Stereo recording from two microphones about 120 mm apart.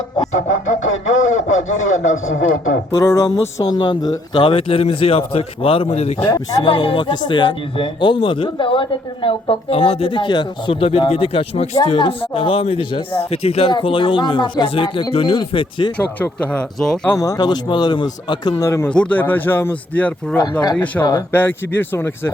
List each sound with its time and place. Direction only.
0.3 s speech: 90° left
2.9 s music: 25° left (ahead or behind)
3.6 s speech: 35° left (ahead or behind); by 6.3 s 60° left (ahead or behind)
6.3 s speech: 35° left (ahead or behind); by 11.8 s 70° left (ahead or behind)
11.9 s speech: 45° left (ahead or behind)
13.7 s speech: 45° left (ahead or behind)
16.0 s speech: 10° left (ahead or behind)
17.1 s speech: 30° left (ahead or behind)
18.6 s music: 25° left (ahead or behind)
18.9 s speech: 10° left (ahead or behind)